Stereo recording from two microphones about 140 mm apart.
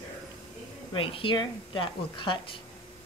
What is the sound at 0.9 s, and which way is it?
A woman's voice, 40° left (ahead or behind).